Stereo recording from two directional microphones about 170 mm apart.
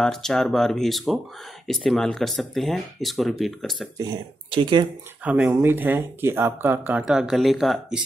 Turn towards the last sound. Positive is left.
turn(degrees=0)  # may be behind; listen again after turning